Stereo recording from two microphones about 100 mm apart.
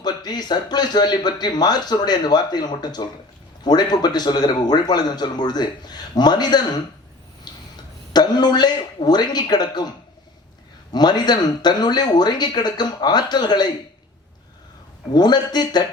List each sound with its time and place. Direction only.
0.0 s speech: 45° left (ahead or behind)
8.1 s speech: 45° left (ahead or behind)
10.9 s speech: 45° left (ahead or behind)
15.1 s speech: 45° left (ahead or behind)